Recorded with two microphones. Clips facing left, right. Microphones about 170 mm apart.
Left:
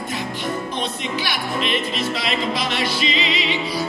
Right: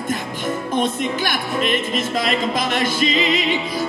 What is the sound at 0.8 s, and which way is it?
Music, 50° right (ahead or behind).